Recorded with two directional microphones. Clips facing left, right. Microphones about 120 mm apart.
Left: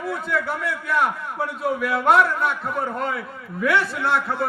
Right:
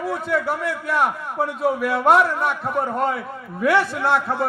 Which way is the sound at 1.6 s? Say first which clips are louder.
Right 2 dB; 40° right (ahead or behind).